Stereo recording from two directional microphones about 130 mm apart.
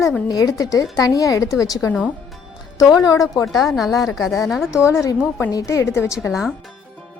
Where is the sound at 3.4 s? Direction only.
Centre (ahead or behind).